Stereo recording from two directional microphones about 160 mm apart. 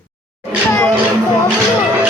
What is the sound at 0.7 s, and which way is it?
Speech, 15° left (ahead or behind).